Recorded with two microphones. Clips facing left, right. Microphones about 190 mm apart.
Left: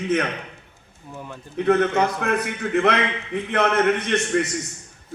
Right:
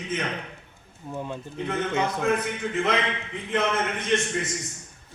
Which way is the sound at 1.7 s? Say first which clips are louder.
Left 8 dB; 65° left (ahead or behind).